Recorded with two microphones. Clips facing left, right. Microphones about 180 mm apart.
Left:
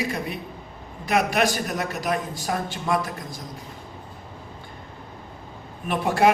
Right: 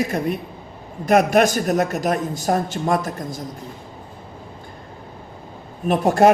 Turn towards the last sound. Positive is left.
turn(degrees=-45)  # may be behind; listen again after turning